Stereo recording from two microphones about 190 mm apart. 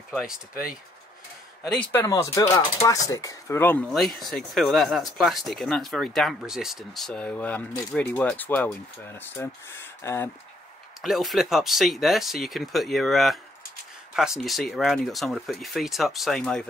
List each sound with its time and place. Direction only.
0.1 s speech: 5° right (ahead or behind)
1.9 s speech: 15° left (ahead or behind)
11.0 s speech: centre (ahead or behind)